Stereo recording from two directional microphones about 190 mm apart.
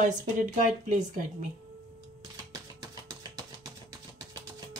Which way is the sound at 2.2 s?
20° right (ahead or behind).